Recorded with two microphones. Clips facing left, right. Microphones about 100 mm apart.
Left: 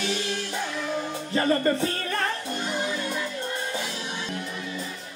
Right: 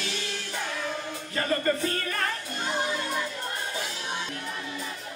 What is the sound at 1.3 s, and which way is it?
Music, 30° left (ahead or behind).